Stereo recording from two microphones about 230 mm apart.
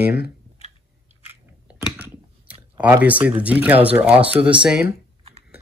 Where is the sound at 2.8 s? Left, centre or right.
Centre.